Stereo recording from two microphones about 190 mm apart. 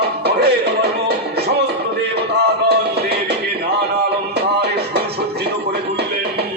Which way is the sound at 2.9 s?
60° right (ahead or behind).